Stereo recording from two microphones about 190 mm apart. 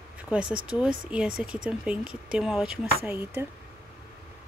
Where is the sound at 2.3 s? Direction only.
5° right (ahead or behind).